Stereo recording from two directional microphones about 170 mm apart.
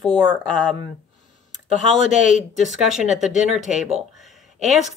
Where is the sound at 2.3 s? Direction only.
45° left (ahead or behind).